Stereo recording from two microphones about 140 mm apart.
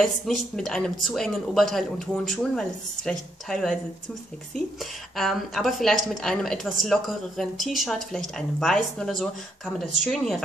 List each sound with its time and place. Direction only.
0.0 s a woman's voice: 5° left (ahead or behind)
5.1 s a woman's voice: centre (ahead or behind)